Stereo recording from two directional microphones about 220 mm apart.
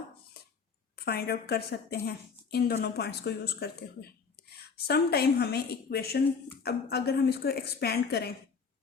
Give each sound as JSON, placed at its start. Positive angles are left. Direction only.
{"t": 1.0, "sound": "speech", "side_deg": 45}